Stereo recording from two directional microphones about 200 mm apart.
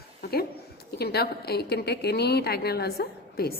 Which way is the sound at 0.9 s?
55° left (ahead or behind).